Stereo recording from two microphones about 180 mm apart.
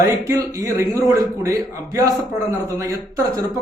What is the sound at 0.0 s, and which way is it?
Speech, 20° right (ahead or behind).